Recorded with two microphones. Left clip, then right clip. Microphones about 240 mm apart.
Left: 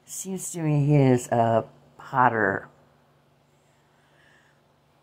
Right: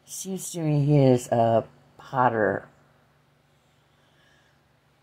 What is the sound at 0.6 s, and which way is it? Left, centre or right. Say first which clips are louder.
Speech: right 1 dB; centre.